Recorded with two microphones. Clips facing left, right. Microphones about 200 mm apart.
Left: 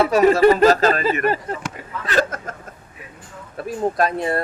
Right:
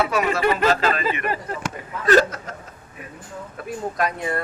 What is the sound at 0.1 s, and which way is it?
Speech, 40° left (ahead or behind).